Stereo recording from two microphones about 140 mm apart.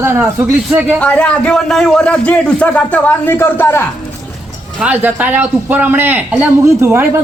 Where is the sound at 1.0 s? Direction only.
10° left (ahead or behind).